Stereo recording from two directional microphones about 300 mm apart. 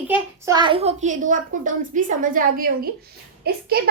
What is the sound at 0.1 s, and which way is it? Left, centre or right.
A child's voice, centre.